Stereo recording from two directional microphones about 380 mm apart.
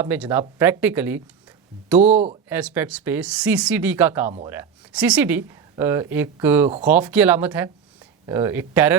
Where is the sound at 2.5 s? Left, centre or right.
Centre.